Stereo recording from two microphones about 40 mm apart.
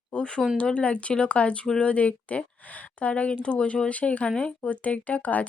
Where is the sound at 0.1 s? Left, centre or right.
Left.